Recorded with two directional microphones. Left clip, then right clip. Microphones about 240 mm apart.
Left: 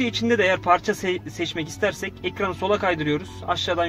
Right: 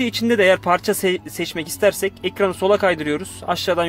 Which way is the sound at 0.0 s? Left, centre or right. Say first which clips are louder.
Right 4 dB; right.